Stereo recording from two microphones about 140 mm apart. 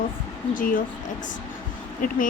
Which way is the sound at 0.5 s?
80° left.